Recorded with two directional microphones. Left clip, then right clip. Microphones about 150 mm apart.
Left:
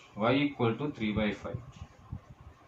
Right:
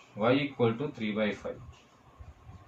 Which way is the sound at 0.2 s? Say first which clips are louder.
Right 2 dB; 25° left (ahead or behind).